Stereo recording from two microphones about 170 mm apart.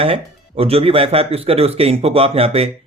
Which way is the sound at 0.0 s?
35° right (ahead or behind).